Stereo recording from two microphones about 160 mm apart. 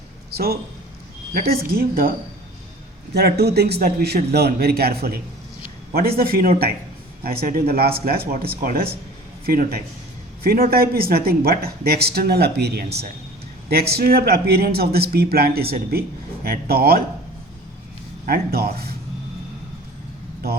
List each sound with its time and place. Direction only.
0.3 s a man's voice: 80° right
3.2 s a man's voice: 80° right
18.3 s a man's voice: 75° right (ahead or behind)